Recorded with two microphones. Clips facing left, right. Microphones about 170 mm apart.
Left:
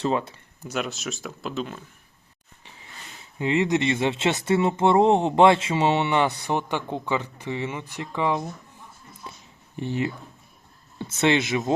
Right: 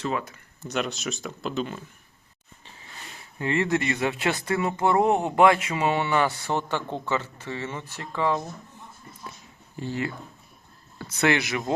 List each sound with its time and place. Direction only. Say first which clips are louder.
0.0 s speech: left 4 dB; 30° left (ahead or behind)
0.6 s speech: right 1 dB; 5° left (ahead or behind)
3.3 s speech: left 2 dB; 20° left (ahead or behind)
9.7 s speech: left 3 dB; 20° left (ahead or behind)